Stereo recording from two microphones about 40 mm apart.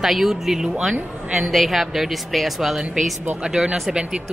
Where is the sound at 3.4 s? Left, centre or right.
Centre.